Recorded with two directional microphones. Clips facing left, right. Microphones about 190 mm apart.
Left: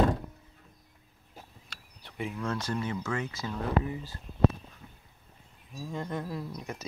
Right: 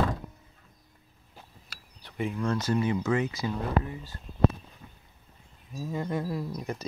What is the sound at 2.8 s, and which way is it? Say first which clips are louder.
Speech: right 6 dB; 15° right (ahead or behind).